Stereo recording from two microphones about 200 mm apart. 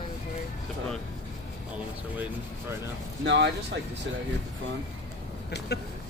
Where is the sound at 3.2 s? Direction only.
60° right (ahead or behind).